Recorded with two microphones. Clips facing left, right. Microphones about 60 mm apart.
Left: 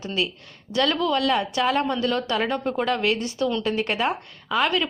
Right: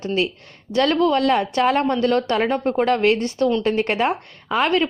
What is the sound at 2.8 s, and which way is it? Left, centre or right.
Speech, right.